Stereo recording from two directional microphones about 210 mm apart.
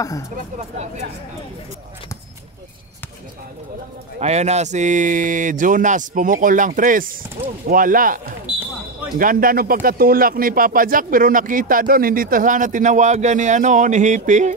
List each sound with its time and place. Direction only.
0.6 s speech: 30° right (ahead or behind)
4.2 s speech: 30° right (ahead or behind)
9.2 s speech: 40° right (ahead or behind)